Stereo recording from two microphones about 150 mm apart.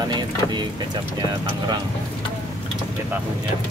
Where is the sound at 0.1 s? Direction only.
30° right (ahead or behind).